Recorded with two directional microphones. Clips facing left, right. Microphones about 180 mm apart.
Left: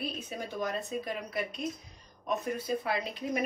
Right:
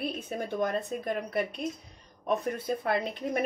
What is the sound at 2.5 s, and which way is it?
Speech, 55° right (ahead or behind).